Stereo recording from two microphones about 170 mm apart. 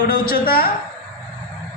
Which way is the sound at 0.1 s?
60° left (ahead or behind).